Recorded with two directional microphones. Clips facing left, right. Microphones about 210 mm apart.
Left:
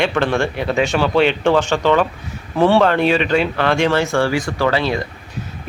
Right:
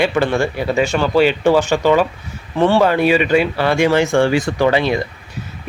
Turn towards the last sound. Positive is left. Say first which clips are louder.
# right 3 dB
turn(degrees=-15)  # may be behind; listen again after turning